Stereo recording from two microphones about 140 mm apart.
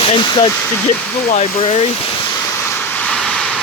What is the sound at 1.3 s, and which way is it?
Speech, 50° left (ahead or behind).